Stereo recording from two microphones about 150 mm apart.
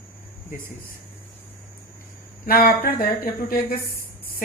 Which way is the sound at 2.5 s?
75° left (ahead or behind).